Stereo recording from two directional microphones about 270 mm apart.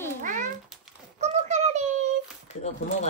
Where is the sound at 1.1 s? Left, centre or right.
Right.